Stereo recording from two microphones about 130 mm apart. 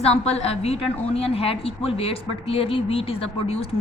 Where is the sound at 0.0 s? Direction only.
55° left (ahead or behind).